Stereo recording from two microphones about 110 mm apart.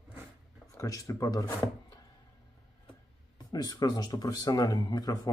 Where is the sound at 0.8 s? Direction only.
30° left (ahead or behind).